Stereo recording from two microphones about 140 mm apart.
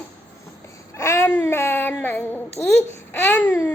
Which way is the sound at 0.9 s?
20° left (ahead or behind).